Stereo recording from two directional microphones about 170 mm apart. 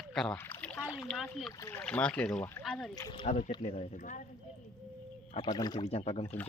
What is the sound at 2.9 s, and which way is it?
Speech, 25° left (ahead or behind).